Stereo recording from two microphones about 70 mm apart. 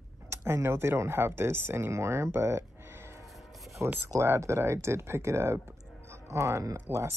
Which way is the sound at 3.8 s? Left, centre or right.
Right.